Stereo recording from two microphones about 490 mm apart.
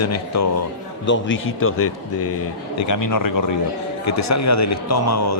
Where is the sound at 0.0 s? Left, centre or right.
Left.